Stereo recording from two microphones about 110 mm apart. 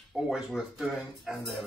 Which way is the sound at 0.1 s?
5° right (ahead or behind).